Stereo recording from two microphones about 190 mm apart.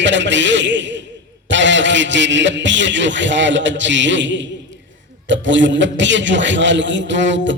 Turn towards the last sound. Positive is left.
turn(degrees=-70)  # may be behind; listen again after turning